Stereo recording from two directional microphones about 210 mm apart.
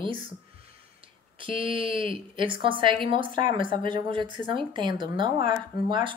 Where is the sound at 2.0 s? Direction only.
25° right (ahead or behind).